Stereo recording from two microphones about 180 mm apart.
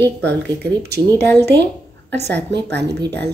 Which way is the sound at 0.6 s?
65° right (ahead or behind).